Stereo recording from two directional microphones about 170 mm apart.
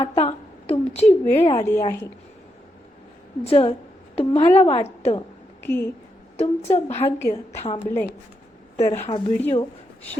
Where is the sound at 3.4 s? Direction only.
35° left (ahead or behind).